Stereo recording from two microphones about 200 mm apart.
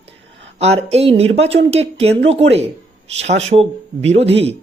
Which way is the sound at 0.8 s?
30° right (ahead or behind).